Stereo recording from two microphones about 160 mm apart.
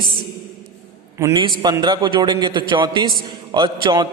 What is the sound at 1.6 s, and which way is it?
A man's voice, 25° right (ahead or behind).